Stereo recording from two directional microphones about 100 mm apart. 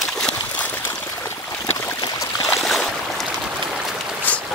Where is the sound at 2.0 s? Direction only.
40° left (ahead or behind).